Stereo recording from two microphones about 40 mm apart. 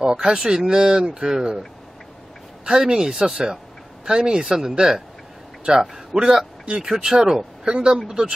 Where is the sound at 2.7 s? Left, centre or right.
Centre.